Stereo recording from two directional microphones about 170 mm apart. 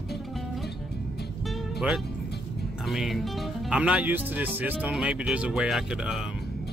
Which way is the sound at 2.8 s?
Centre (ahead or behind).